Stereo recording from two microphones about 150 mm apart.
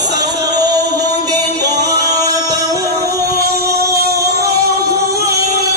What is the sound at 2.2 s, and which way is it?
Music, 25° right (ahead or behind).